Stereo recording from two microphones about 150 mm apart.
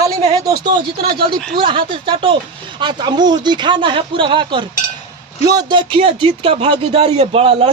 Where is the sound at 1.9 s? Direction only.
35° right (ahead or behind).